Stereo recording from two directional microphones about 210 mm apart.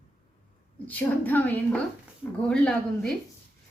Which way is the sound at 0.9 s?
10° left (ahead or behind).